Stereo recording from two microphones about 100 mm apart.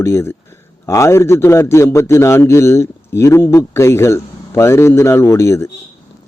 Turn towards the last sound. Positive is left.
turn(degrees=30)  # may be behind; listen again after turning